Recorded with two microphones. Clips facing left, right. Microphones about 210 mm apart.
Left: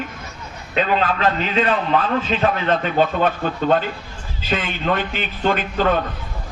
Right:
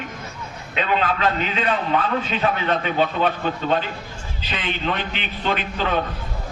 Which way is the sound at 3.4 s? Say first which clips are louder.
Left 3 dB; 45° left (ahead or behind).